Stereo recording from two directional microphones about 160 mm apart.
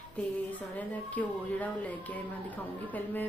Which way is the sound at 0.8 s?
10° left (ahead or behind).